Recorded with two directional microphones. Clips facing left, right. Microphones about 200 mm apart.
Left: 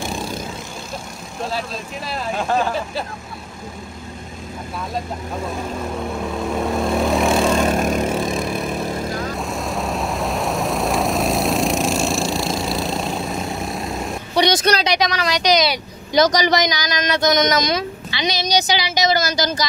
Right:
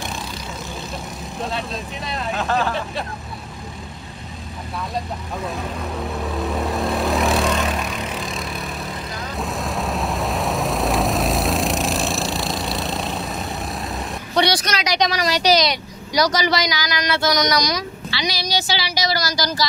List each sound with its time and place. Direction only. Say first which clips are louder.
2.3 s speech: left 2 dB; 15° left (ahead or behind)
6.1 s vehicle: left 1 dB; centre (ahead or behind)
7.6 s vehicle: left 7 dB; 45° left (ahead or behind)
9.3 s vehicle: left 1 dB; centre (ahead or behind)
14.3 s a woman's voice: left 2 dB; 20° left (ahead or behind)
15.1 s a woman's voice: even; 10° right (ahead or behind)
16.1 s speech: left 3 dB; 20° left (ahead or behind)